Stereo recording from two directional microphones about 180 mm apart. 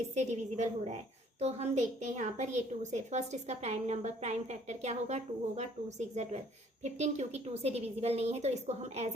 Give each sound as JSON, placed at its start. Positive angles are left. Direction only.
{"t": 0.1, "sound": "a woman's voice", "side_deg": -40}